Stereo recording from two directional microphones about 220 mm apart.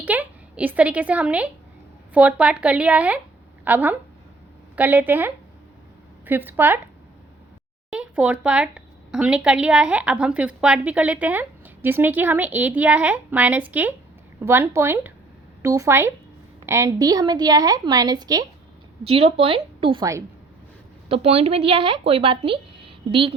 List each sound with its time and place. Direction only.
0.0 s a woman's voice: 5° right (ahead or behind)
7.9 s a woman's voice: 5° right (ahead or behind); by 23.3 s 25° right (ahead or behind)